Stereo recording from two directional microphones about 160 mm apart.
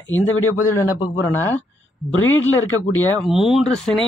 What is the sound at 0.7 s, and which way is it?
Speech, 15° left (ahead or behind).